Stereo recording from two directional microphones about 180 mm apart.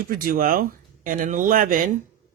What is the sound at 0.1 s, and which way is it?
Speech, 55° right (ahead or behind).